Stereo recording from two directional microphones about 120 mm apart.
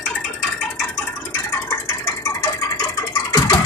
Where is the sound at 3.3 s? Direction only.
35° left (ahead or behind).